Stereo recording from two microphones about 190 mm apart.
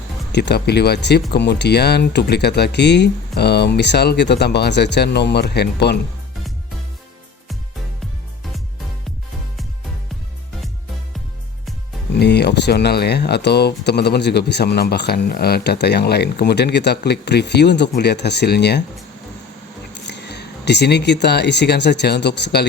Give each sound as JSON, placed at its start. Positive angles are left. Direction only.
{"t": 0.3, "sound": "speech", "side_deg": 65}
{"t": 12.2, "sound": "speech", "side_deg": 60}
{"t": 19.9, "sound": "speech", "side_deg": 65}